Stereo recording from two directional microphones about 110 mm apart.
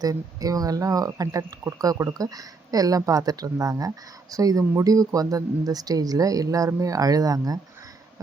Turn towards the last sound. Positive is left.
turn(degrees=-35)  # may be behind; listen again after turning